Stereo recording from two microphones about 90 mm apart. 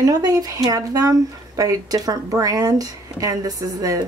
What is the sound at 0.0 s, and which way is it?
Speech, 40° right (ahead or behind).